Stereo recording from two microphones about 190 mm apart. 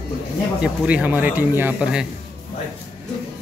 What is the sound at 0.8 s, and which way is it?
Speech, 5° right (ahead or behind).